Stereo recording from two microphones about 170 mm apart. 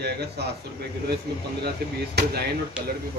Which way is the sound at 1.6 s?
70° right (ahead or behind).